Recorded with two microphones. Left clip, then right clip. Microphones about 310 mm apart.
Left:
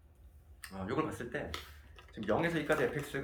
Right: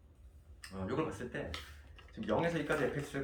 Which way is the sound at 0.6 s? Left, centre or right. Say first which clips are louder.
Left 1 dB; centre.